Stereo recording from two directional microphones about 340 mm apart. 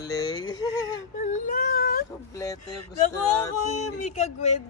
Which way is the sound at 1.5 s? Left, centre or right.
Left.